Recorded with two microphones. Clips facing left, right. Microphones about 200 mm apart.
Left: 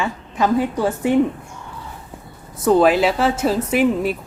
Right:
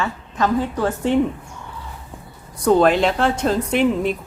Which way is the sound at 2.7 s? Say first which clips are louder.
Left 1 dB; 5° left (ahead or behind).